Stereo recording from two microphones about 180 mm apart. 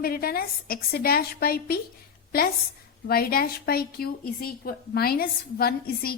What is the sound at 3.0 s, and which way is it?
A woman's voice, 55° left (ahead or behind).